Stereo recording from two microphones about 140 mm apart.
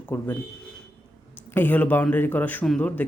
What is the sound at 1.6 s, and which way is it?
Speech, 10° left (ahead or behind).